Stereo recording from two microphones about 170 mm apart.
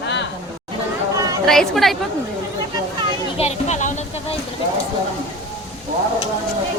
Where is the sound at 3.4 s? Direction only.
40° left (ahead or behind).